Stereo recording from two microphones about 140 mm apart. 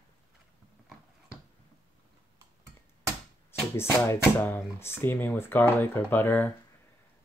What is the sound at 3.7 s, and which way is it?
Speech, 15° left (ahead or behind).